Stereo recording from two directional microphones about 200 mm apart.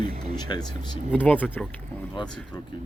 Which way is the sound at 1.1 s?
5° left (ahead or behind).